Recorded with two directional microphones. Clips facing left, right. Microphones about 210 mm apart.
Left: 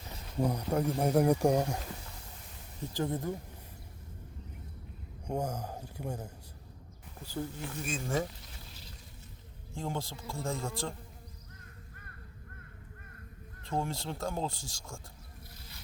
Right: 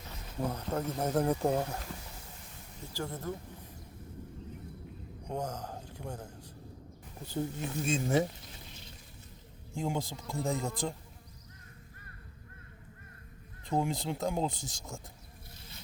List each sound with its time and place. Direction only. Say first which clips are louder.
0.3 s speech: left 4 dB; 15° left (ahead or behind)
2.9 s speech: left 4 dB; 15° left (ahead or behind)
5.3 s speech: left 2 dB; 10° left (ahead or behind)
7.3 s speech: right 3 dB; 20° right (ahead or behind)
9.7 s speech: right 3 dB; 15° right (ahead or behind)
13.7 s speech: right 3 dB; 15° right (ahead or behind)